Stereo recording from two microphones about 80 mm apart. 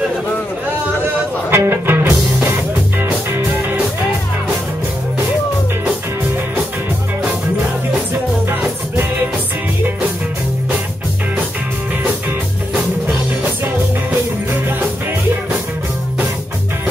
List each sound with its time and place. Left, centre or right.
1.5 s music: right
8.5 s music: right